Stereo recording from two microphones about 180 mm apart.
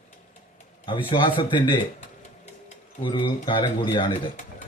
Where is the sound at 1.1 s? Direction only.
30° left (ahead or behind).